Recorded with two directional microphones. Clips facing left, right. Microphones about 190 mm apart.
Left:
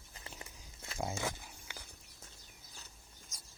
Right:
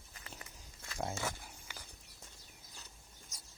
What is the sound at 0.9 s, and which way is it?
Speech, centre (ahead or behind).